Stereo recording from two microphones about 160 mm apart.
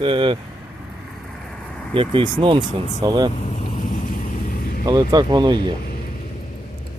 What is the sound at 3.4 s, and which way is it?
Vehicle, 50° left (ahead or behind).